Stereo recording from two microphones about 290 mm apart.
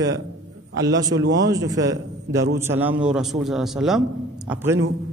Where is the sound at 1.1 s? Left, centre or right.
Right.